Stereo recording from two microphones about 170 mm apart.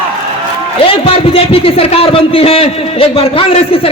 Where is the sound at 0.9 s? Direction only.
35° left (ahead or behind).